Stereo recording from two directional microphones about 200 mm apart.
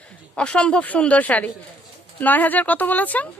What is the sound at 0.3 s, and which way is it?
Speech, 5° left (ahead or behind).